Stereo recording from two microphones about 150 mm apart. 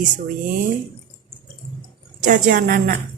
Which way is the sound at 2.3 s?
60° right (ahead or behind).